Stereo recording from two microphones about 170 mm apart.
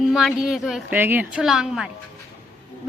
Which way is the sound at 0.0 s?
Centre (ahead or behind).